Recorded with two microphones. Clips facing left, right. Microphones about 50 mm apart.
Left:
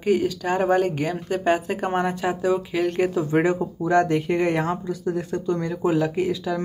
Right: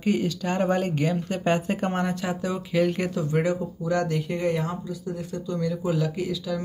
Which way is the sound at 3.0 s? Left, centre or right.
Left.